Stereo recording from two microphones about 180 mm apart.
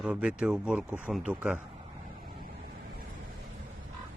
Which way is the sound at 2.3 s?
55° right (ahead or behind).